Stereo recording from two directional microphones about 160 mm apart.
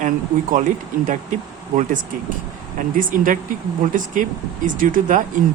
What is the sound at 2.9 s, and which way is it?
Speech, 55° right (ahead or behind).